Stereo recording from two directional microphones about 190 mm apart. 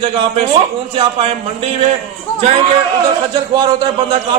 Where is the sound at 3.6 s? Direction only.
20° right (ahead or behind).